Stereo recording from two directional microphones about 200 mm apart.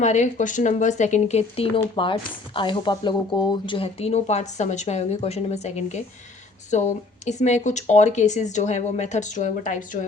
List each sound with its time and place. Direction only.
0.0 s speech: 35° left (ahead or behind)